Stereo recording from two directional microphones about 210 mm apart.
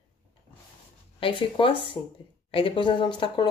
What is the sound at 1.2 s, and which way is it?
Speech, 25° left (ahead or behind).